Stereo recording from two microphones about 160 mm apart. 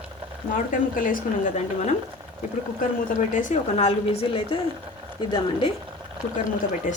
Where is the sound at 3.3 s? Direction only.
50° left (ahead or behind).